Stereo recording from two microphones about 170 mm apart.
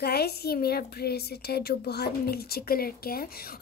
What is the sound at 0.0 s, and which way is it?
A woman's voice, 70° left (ahead or behind).